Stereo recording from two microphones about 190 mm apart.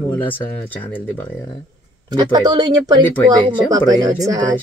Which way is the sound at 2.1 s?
20° right (ahead or behind).